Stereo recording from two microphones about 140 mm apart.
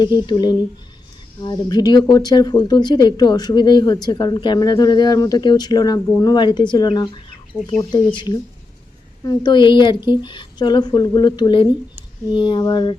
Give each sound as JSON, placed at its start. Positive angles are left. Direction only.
{"t": 0.0, "sound": "speech", "side_deg": 35}